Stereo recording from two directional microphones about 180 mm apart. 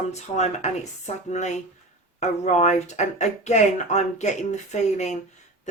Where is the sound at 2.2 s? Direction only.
40° left (ahead or behind).